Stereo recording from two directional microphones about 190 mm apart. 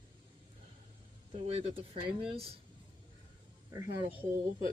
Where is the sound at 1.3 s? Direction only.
30° right (ahead or behind).